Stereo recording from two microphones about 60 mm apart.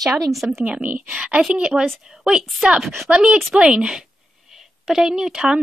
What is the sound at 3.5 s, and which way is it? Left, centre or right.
A woman's voice, centre.